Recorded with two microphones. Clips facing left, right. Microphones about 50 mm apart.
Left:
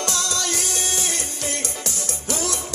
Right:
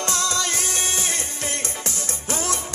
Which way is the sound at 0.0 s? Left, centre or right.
Right.